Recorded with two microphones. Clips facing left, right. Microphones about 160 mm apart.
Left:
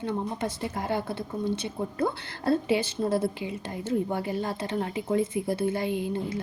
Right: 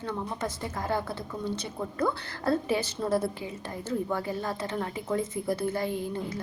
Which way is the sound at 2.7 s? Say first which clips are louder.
Left 2 dB; 20° left (ahead or behind).